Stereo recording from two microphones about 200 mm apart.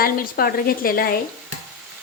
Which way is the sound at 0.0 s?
45° left (ahead or behind).